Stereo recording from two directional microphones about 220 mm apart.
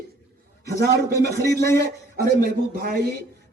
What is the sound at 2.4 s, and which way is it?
Speech, 45° right (ahead or behind).